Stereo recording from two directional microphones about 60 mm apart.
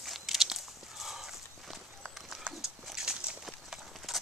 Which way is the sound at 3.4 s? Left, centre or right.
Centre.